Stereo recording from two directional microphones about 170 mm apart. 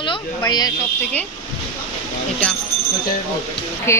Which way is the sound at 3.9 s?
15° left (ahead or behind).